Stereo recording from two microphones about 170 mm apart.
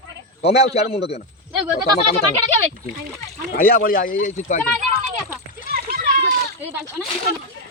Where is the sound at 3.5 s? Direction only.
60° left (ahead or behind).